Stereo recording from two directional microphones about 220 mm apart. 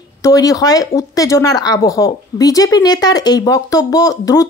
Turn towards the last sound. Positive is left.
turn(degrees=15)  # may be behind; listen again after turning